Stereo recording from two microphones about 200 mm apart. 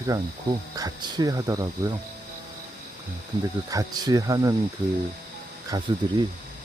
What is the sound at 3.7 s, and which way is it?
Speech, 20° right (ahead or behind).